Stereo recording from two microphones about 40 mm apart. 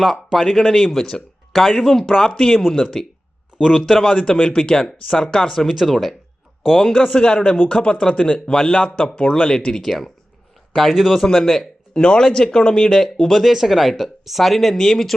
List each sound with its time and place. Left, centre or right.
0.0 s speech: centre
3.6 s speech: centre
4.0 s speech: left
5.5 s speech: centre
7.1 s speech: left
9.8 s speech: centre
11.3 s speech: centre
13.4 s speech: centre